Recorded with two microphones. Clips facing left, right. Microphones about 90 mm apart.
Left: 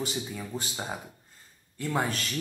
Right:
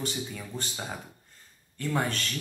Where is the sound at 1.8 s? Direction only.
5° left (ahead or behind).